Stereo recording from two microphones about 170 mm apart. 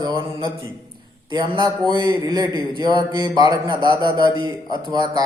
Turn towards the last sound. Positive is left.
turn(degrees=-25)  # may be behind; listen again after turning